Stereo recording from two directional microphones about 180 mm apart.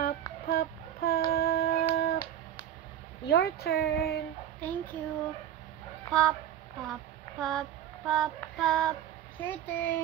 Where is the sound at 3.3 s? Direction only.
60° left (ahead or behind).